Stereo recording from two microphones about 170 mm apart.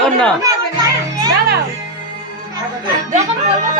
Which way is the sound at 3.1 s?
45° right (ahead or behind).